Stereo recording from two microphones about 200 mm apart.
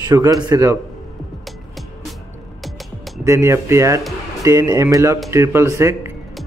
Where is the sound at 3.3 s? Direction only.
15° right (ahead or behind).